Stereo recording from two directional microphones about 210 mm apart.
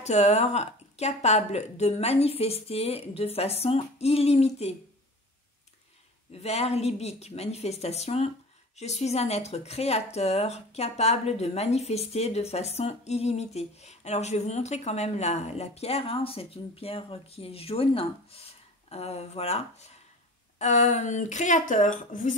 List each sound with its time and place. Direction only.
0.0 s a woman's voice: 30° left (ahead or behind)
6.3 s speech: 30° left (ahead or behind)